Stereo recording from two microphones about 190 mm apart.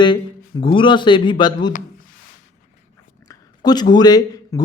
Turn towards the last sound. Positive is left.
turn(degrees=20)  # may be behind; listen again after turning